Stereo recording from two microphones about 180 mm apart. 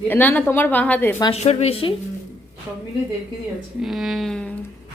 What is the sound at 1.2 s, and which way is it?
Speech, 35° left (ahead or behind).